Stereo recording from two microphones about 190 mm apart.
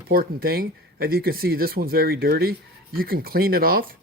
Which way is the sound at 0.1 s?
50° right (ahead or behind).